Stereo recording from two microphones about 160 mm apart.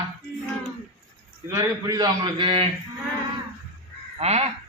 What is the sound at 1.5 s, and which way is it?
A man's voice, 20° right (ahead or behind).